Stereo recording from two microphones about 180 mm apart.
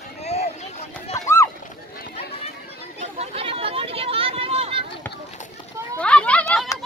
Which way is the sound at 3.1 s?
35° right (ahead or behind).